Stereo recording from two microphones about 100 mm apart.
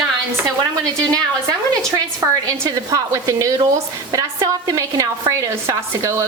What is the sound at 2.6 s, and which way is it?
A woman's voice, 35° right (ahead or behind).